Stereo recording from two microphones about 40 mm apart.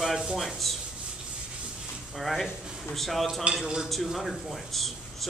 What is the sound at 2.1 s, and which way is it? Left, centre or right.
Speech, centre.